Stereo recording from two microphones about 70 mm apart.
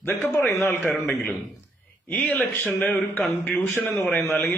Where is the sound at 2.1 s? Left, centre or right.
Left.